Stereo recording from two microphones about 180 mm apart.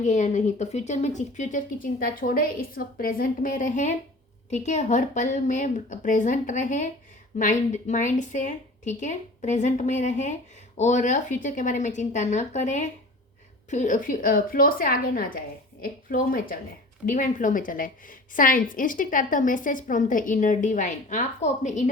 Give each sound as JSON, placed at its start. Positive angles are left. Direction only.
{"t": 0.0, "sound": "a woman's voice", "side_deg": 40}